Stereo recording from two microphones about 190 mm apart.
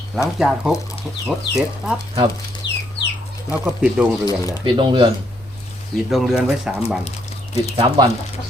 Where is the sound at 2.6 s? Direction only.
20° left (ahead or behind).